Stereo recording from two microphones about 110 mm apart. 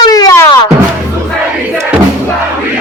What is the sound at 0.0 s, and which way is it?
Music, 35° left (ahead or behind).